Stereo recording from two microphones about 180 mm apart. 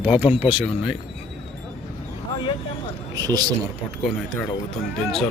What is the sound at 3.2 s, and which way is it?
Speech, 20° right (ahead or behind).